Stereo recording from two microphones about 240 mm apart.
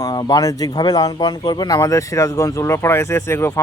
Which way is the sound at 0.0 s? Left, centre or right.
Centre.